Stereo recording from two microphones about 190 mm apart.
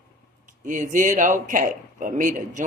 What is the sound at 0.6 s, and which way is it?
Speech, 40° right (ahead or behind).